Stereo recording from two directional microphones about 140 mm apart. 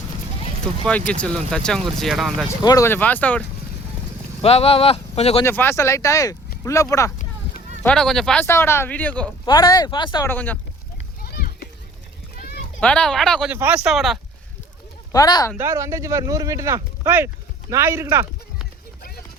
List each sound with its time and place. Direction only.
0.9 s speech: 10° left (ahead or behind)
2.6 s speech: 20° left (ahead or behind)
4.4 s speech: 45° left (ahead or behind)
5.4 s speech: 15° left (ahead or behind)
7.9 s speech: 5° left (ahead or behind)
8.4 s speech: 20° left (ahead or behind)
9.5 s speech: 30° left (ahead or behind)
10.2 s speech: 15° left (ahead or behind)
11.2 s a sound: 90° left
12.8 s speech: 5° left (ahead or behind)
13.5 s speech: 15° right (ahead or behind)
13.9 s speech: centre (ahead or behind)
15.1 s speech: 30° left (ahead or behind)
15.5 s speech: 20° right (ahead or behind)